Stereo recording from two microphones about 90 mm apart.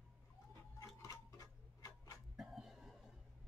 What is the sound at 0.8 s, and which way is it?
Tick-tock, 35° left (ahead or behind).